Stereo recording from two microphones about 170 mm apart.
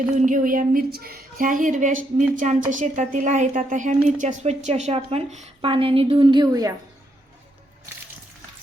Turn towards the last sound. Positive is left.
turn(degrees=-20)  # may be behind; listen again after turning